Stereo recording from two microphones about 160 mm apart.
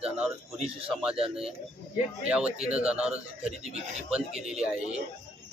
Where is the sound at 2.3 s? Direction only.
5° right (ahead or behind).